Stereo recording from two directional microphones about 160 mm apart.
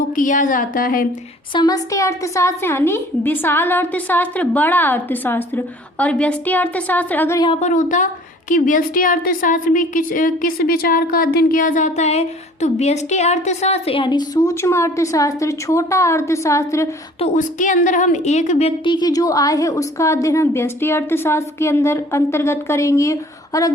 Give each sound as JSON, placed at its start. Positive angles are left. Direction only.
{"t": 0.2, "sound": "a woman's voice", "side_deg": 55}
{"t": 1.5, "sound": "a woman's voice", "side_deg": 25}
{"t": 7.3, "sound": "a woman's voice", "side_deg": 30}
{"t": 7.6, "sound": "a woman's voice", "side_deg": 50}
{"t": 17.2, "sound": "a woman's voice", "side_deg": 45}
{"t": 18.9, "sound": "a woman's voice", "side_deg": 25}